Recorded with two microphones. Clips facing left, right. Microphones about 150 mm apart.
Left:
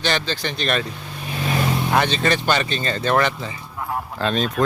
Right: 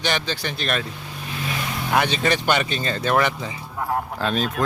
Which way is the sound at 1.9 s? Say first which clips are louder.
Right 1 dB; 10° right (ahead or behind).